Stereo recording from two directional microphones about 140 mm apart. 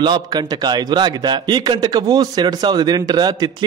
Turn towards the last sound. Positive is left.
turn(degrees=-30)  # may be behind; listen again after turning